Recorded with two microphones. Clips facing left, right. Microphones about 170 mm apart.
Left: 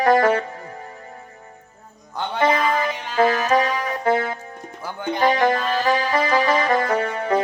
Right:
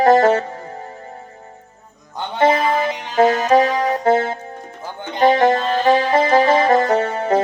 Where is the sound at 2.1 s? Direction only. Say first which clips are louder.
Right 4 dB; 25° right (ahead or behind).